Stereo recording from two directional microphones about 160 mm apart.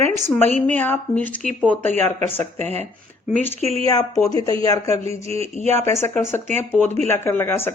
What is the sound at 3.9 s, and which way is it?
Speech, 25° left (ahead or behind).